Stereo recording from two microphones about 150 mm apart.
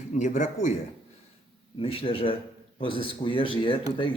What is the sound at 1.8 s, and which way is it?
A man's voice, 40° left (ahead or behind).